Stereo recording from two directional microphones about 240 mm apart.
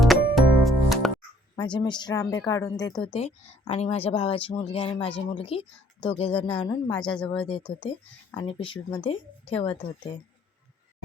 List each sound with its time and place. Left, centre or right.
0.0 s music: centre
1.5 s a woman's voice: centre